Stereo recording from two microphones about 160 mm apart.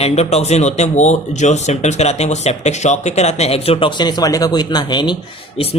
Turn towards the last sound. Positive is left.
turn(degrees=35)  # may be behind; listen again after turning